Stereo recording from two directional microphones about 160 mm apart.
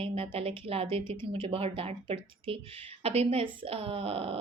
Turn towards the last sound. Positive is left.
turn(degrees=-35)  # may be behind; listen again after turning